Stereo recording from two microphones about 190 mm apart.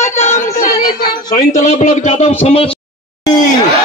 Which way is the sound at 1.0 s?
20° left (ahead or behind).